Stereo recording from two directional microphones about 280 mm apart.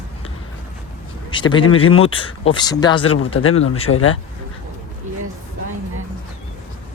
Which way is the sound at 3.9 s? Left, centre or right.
Left.